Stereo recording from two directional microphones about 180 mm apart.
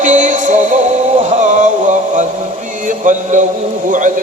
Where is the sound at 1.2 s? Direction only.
40° right (ahead or behind).